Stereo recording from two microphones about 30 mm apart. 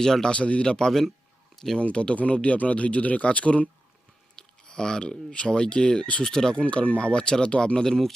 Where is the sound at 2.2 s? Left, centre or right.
Left.